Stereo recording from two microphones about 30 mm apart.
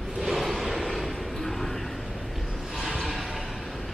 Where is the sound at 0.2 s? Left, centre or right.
Centre.